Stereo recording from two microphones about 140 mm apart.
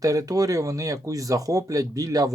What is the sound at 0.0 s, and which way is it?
Speech, 25° right (ahead or behind).